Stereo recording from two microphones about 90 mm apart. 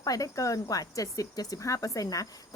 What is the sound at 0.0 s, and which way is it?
Speech, 40° left (ahead or behind).